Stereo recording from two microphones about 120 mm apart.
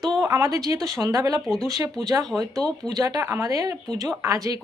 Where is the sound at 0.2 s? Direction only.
25° right (ahead or behind).